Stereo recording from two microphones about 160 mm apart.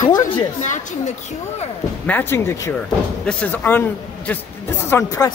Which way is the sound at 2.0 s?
10° left (ahead or behind).